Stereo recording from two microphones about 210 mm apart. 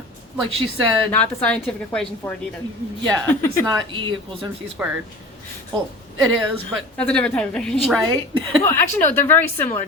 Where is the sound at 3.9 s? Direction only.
25° right (ahead or behind).